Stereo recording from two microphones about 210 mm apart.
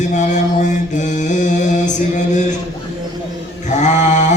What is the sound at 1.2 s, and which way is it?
Music, 35° left (ahead or behind).